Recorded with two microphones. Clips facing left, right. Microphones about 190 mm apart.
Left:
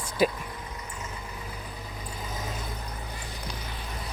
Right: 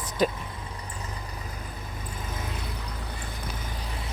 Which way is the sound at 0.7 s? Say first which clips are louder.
Even; 35° right (ahead or behind).